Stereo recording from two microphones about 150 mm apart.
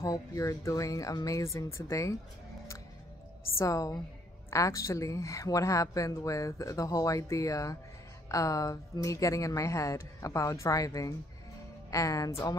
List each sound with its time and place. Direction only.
0.0 s a woman's voice: 20° left (ahead or behind)
3.5 s a woman's voice: 20° left (ahead or behind)